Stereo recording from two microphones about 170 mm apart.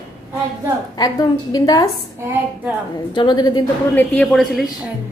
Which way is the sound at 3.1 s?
25° left (ahead or behind).